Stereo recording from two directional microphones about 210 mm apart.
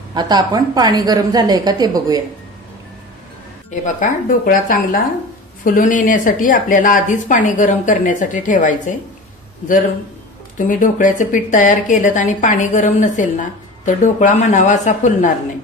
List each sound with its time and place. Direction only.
0.1 s a woman's voice: 20° right (ahead or behind)
3.8 s a woman's voice: 40° left (ahead or behind)
10.7 s a woman's voice: 40° left (ahead or behind)